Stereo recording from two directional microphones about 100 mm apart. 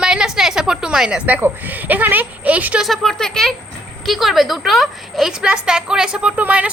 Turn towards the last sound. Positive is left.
turn(degrees=-15)  # may be behind; listen again after turning